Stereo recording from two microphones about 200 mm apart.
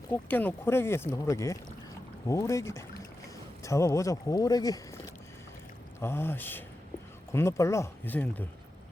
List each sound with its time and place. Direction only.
0.1 s speech: 10° left (ahead or behind)
6.0 s speech: 10° left (ahead or behind)